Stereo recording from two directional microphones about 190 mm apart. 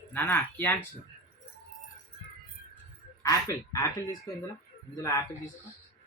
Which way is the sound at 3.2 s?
15° left (ahead or behind).